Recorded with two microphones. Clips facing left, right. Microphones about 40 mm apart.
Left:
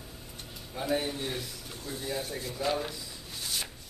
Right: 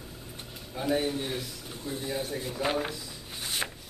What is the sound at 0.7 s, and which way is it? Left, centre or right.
Speech, centre.